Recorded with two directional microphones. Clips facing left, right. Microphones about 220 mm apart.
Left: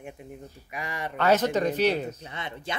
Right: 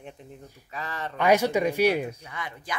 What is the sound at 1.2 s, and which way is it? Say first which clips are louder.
Speech: right 1 dB; 10° right (ahead or behind).